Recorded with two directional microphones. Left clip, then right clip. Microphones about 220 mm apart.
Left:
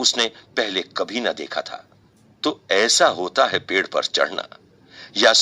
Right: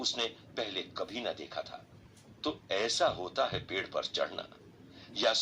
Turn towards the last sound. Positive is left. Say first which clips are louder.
# left 14 dB
turn(degrees=50)  # may be behind; listen again after turning